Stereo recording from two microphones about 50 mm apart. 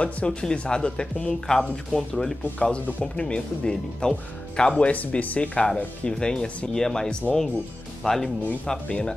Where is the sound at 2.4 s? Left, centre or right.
Left.